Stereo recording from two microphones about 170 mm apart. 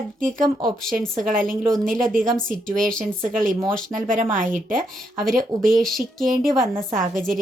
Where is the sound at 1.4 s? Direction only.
5° left (ahead or behind).